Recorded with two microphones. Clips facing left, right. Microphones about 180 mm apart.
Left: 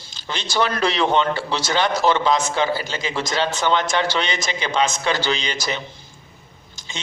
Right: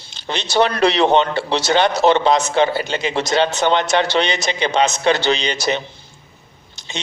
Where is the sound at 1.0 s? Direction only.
20° right (ahead or behind).